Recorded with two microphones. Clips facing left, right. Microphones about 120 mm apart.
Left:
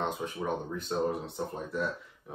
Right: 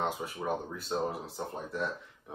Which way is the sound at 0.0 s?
5° right (ahead or behind).